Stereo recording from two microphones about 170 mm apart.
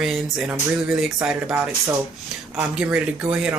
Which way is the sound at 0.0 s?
5° right (ahead or behind).